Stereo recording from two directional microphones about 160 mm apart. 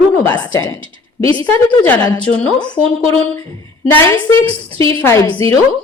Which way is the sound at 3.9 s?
15° left (ahead or behind).